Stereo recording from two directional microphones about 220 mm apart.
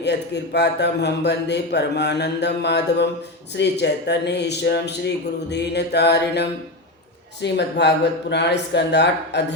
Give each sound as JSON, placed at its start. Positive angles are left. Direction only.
{"t": 0.0, "sound": "a man's voice", "side_deg": 50}